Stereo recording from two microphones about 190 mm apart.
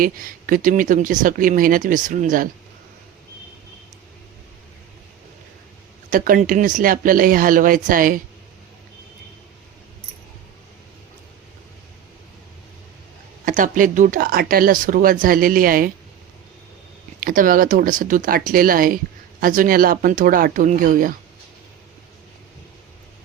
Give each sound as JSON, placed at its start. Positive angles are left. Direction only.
{"t": 0.0, "sound": "speech", "side_deg": -45}
{"t": 6.1, "sound": "speech", "side_deg": -45}
{"t": 13.4, "sound": "speech", "side_deg": -45}
{"t": 17.2, "sound": "speech", "side_deg": -45}